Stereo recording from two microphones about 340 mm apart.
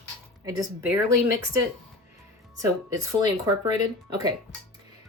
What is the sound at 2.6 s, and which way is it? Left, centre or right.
Speech, centre.